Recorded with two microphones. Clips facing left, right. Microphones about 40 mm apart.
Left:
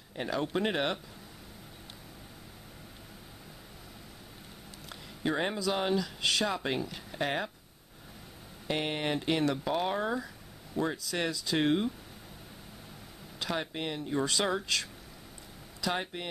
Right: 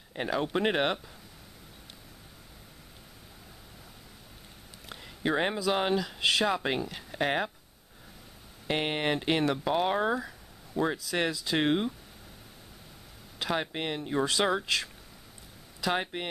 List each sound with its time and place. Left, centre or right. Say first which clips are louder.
0.1 s speech: right 2 dB; centre
4.8 s a sound: right 2 dB; centre
5.7 s speech: right 1 dB; right
8.6 s speech: right 3 dB; right
9.4 s speech: right 2 dB; centre
13.4 s speech: right 3 dB; centre